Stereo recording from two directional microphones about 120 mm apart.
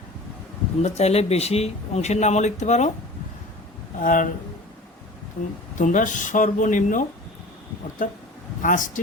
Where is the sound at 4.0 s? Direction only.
90° left.